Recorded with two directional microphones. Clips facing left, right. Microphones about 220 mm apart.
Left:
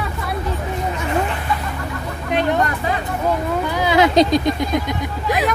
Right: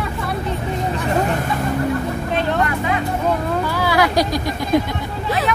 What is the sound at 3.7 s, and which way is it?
Vehicle, 20° left (ahead or behind).